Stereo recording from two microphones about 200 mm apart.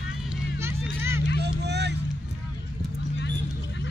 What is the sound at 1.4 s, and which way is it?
Vehicle, 55° right (ahead or behind).